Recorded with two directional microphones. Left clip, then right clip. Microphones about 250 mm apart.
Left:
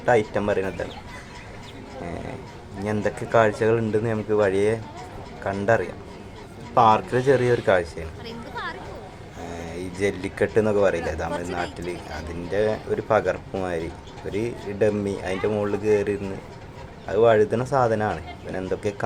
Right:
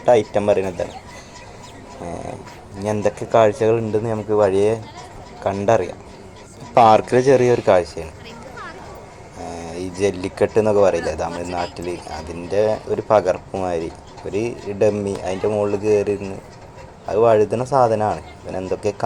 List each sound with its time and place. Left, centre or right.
0.0 s speech: centre
2.8 s speech: centre
9.5 s speech: centre